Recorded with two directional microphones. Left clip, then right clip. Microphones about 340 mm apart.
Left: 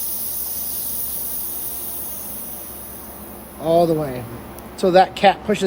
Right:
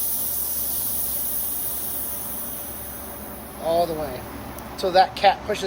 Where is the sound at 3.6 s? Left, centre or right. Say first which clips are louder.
Left 6 dB; left.